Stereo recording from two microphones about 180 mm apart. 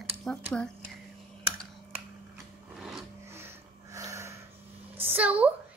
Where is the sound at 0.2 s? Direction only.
Centre (ahead or behind).